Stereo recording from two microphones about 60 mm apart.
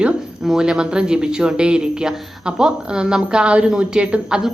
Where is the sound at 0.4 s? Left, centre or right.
Centre.